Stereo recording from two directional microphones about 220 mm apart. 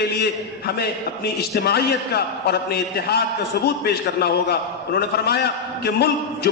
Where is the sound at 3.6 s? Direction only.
45° left (ahead or behind).